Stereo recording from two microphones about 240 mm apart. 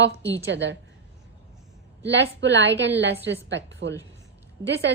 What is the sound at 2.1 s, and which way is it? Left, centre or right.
A woman's voice, right.